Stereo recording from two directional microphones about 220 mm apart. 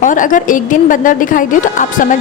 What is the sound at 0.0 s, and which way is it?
A woman's voice, 35° left (ahead or behind).